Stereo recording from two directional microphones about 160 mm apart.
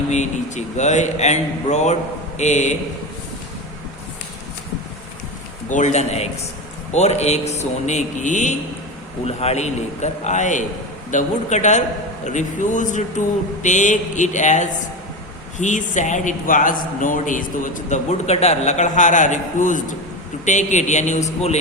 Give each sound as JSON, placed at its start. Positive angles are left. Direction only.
{"t": 0.1, "sound": "a man's voice", "side_deg": 45}
{"t": 5.6, "sound": "a man's voice", "side_deg": 50}